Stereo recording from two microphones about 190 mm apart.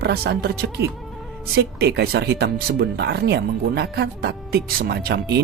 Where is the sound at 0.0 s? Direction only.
60° right (ahead or behind).